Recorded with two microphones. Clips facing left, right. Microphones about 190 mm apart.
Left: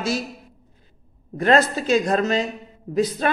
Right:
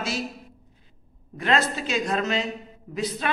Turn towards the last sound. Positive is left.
turn(degrees=45)  # may be behind; listen again after turning